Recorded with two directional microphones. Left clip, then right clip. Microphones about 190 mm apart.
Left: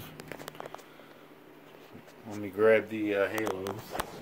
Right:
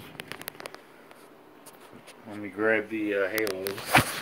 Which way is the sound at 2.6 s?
45° left (ahead or behind).